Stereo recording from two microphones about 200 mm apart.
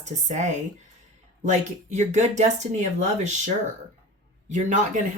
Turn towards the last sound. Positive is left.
turn(degrees=-35)  # may be behind; listen again after turning